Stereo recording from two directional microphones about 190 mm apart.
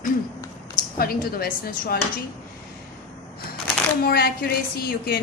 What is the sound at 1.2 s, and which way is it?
Speech, 50° left (ahead or behind).